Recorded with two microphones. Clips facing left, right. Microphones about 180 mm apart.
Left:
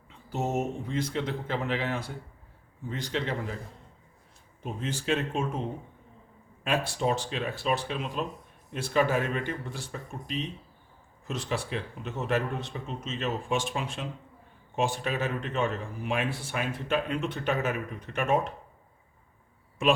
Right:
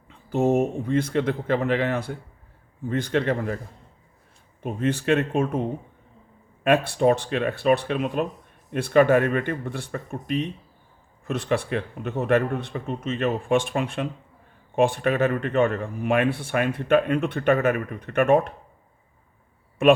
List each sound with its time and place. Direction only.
0.3 s speech: 55° right (ahead or behind)
4.6 s speech: 60° right (ahead or behind)
6.7 s speech: 60° right (ahead or behind)
19.8 s speech: 60° right (ahead or behind)